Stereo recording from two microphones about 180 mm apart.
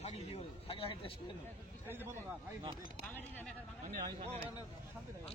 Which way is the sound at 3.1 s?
10° left (ahead or behind).